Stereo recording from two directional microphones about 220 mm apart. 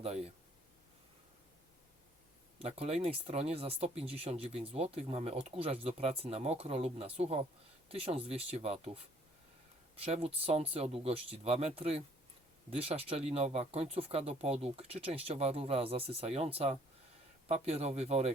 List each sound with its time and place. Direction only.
0.0 s speech: 30° right (ahead or behind)
2.6 s speech: 30° right (ahead or behind)